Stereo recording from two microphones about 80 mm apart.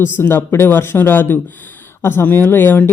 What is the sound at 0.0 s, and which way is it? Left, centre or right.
Speech, left.